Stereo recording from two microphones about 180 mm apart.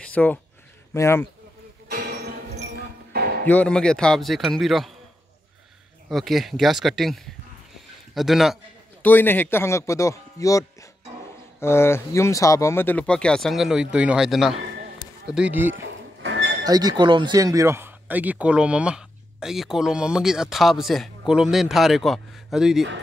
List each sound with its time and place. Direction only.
0.0 s a sound: 10° left (ahead or behind)
0.9 s speech: 15° left (ahead or behind)
1.9 s music: 60° right (ahead or behind)
3.4 s speech: 5° left (ahead or behind)
6.0 s speech: centre (ahead or behind)
9.0 s speech: 10° left (ahead or behind); by 15.7 s 10° right (ahead or behind)
15.7 s music: 90° right
16.6 s speech: 20° right (ahead or behind); by 22.8 s centre (ahead or behind)